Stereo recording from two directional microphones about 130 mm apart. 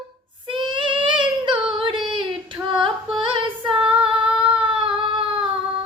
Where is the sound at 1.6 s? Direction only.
40° right (ahead or behind).